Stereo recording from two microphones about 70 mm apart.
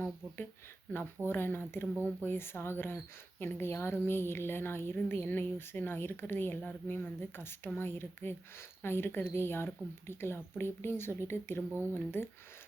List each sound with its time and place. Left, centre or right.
1.3 s speech: left